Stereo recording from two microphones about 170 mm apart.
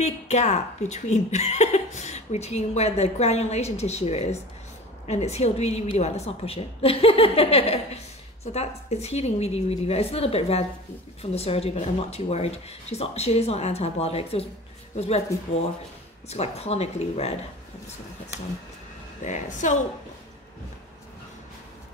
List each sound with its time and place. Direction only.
0.0 s a woman's voice: 40° left (ahead or behind)
16.3 s a woman's voice: 40° left (ahead or behind)
19.2 s a woman's voice: 45° left (ahead or behind)